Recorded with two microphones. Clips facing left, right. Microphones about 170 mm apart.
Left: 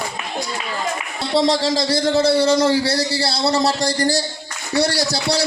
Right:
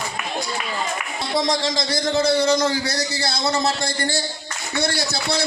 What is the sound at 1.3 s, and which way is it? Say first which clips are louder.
A man's voice: left 5 dB; 30° left (ahead or behind).